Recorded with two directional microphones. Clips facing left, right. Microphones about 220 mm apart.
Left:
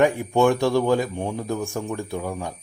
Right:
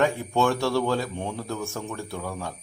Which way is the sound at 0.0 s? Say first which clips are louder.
Left 5 dB; 15° left (ahead or behind).